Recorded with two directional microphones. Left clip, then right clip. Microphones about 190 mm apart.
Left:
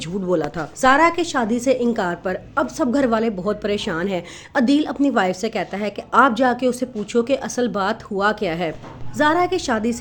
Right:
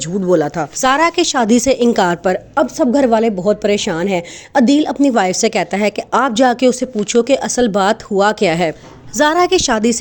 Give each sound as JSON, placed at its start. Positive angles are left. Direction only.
{"t": 0.0, "sound": "a woman's voice", "side_deg": -30}
{"t": 0.8, "sound": "a woman's voice", "side_deg": -50}